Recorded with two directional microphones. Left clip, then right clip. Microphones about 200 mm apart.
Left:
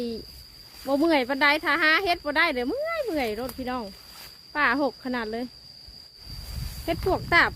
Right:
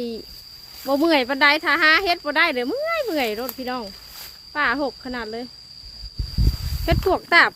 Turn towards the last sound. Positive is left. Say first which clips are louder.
# right 5 dB
turn(degrees=-15)  # may be behind; listen again after turning